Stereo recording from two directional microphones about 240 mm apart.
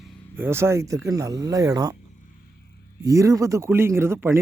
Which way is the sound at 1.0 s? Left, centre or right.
Centre.